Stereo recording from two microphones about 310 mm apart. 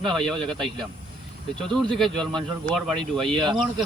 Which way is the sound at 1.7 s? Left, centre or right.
Centre.